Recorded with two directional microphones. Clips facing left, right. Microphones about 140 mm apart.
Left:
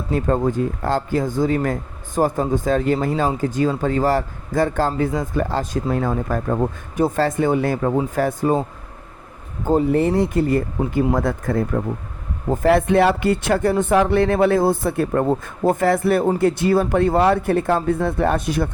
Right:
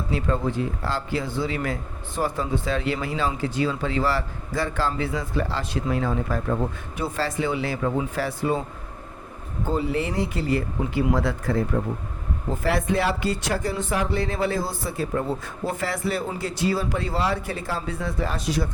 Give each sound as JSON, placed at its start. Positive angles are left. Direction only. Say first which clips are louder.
{"t": 0.1, "sound": "speech", "louder": "left 6 dB", "side_deg": 45}
{"t": 9.6, "sound": "speech", "louder": "left 8 dB", "side_deg": 50}